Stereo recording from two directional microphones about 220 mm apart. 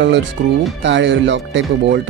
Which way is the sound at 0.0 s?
55° right (ahead or behind).